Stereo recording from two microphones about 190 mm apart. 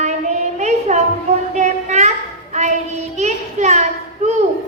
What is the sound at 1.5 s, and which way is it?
Child singing, 35° right (ahead or behind).